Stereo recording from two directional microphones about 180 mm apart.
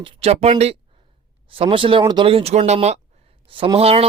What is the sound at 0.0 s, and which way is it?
Speech, 30° right (ahead or behind).